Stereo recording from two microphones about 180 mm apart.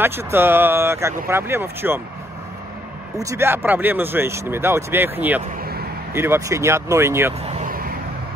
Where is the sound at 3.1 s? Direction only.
15° right (ahead or behind).